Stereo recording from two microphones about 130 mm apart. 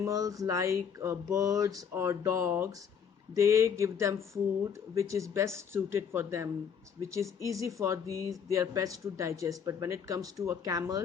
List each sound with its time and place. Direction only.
0.0 s speech: 25° right (ahead or behind)